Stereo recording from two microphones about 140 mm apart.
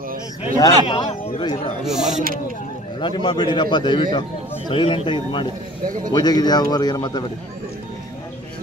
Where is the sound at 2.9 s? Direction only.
35° left (ahead or behind).